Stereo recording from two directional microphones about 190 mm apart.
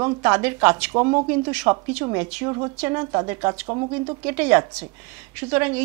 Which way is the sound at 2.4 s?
25° right (ahead or behind).